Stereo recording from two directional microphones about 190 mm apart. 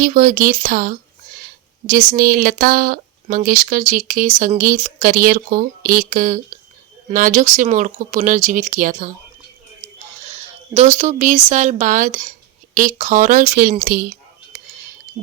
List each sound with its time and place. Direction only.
0.0 s speech: 45° right (ahead or behind)
10.2 s a sound: 35° right (ahead or behind)
10.9 s speech: 40° right (ahead or behind)